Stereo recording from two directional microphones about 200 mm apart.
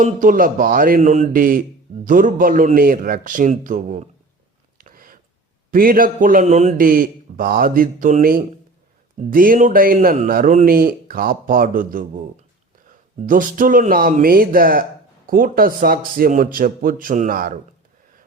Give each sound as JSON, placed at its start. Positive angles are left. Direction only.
{"t": 0.0, "sound": "a man's voice", "side_deg": -40}
{"t": 4.8, "sound": "a sound", "side_deg": -45}
{"t": 5.7, "sound": "a man's voice", "side_deg": -45}
{"t": 13.2, "sound": "a man's voice", "side_deg": -45}